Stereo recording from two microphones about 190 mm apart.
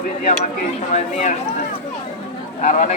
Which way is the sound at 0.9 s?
40° left (ahead or behind).